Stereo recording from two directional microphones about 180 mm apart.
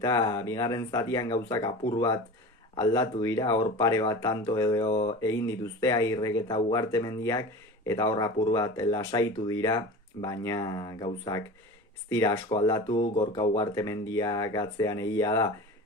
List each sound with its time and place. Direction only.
0.0 s speech: 20° left (ahead or behind)